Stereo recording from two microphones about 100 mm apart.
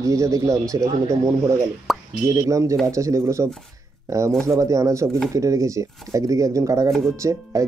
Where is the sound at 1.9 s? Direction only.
Centre (ahead or behind).